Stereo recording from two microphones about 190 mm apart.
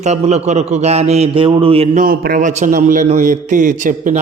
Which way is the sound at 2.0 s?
50° right (ahead or behind).